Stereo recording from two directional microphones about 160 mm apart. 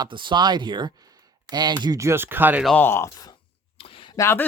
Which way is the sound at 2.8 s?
15° left (ahead or behind).